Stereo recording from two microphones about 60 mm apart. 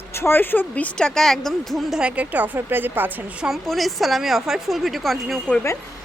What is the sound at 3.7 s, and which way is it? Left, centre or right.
Speech, centre.